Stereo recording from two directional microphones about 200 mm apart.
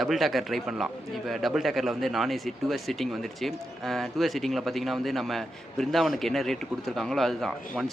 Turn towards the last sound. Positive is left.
turn(degrees=0)  # may be behind; listen again after turning